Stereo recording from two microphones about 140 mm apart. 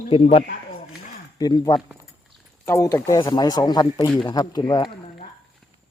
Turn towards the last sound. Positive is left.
turn(degrees=30)  # may be behind; listen again after turning